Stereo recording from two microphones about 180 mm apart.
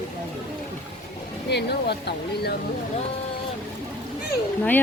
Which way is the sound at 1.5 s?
65° left (ahead or behind).